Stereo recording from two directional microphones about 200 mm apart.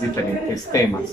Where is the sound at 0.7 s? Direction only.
15° left (ahead or behind).